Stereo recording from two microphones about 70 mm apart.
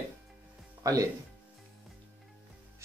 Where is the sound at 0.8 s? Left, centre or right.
Right.